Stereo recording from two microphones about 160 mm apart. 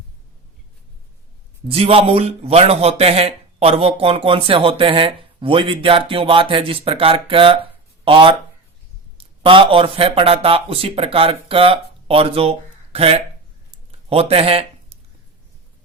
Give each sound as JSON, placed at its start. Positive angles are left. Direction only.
{"t": 1.6, "sound": "a man's voice", "side_deg": -35}